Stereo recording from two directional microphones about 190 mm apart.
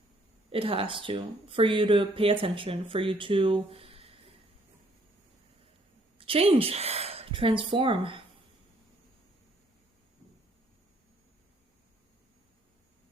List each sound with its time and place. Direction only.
0.5 s speech: 30° right (ahead or behind)
6.1 s a woman's voice: 30° right (ahead or behind)